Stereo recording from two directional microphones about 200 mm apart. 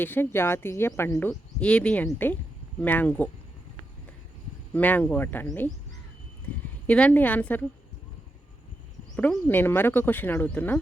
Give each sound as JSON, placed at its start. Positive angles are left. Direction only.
{"t": 0.0, "sound": "speech", "side_deg": 10}
{"t": 4.7, "sound": "speech", "side_deg": 10}
{"t": 6.8, "sound": "speech", "side_deg": 5}
{"t": 9.1, "sound": "speech", "side_deg": 5}